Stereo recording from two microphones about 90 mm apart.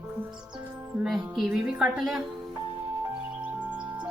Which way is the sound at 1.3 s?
5° right (ahead or behind).